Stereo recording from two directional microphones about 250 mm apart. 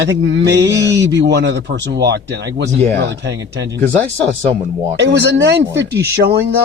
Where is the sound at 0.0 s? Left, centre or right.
Right.